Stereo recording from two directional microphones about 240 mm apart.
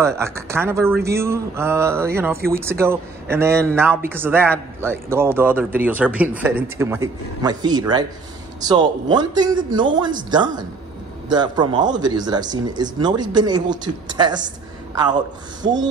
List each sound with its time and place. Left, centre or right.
0.0 s speech: centre